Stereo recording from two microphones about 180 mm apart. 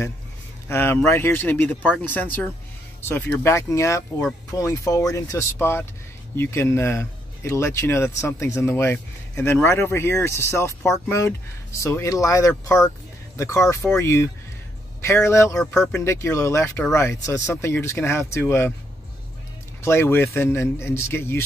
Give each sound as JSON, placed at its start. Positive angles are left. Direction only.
{"t": 0.7, "sound": "speech", "side_deg": 10}
{"t": 19.8, "sound": "speech", "side_deg": 15}